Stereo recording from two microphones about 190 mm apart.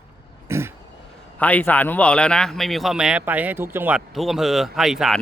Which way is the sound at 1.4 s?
10° left (ahead or behind).